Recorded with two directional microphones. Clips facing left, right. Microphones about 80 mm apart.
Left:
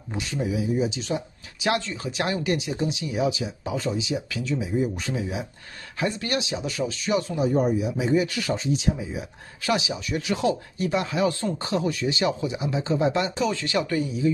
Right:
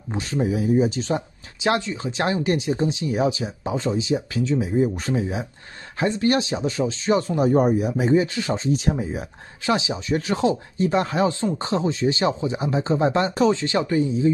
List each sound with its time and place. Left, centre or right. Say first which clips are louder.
0.1 s speech: right 4 dB; right
1.6 s speech: right 3 dB; right
8.1 s speech: right 3 dB; right
9.6 s speech: right 3 dB; right
13.5 s speech: right 4 dB; right